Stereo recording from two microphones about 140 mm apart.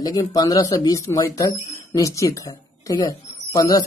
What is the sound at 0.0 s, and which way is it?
Speech, 25° left (ahead or behind).